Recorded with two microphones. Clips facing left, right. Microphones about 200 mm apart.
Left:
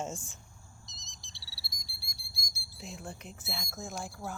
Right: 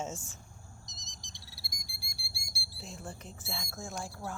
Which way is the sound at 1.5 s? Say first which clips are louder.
Right 2 dB; 50° right (ahead or behind).